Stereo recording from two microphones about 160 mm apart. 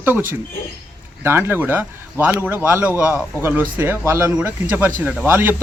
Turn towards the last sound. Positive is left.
turn(degrees=-15)  # may be behind; listen again after turning